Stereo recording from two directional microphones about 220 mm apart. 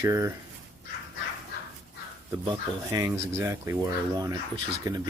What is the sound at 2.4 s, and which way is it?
Speech, 15° right (ahead or behind).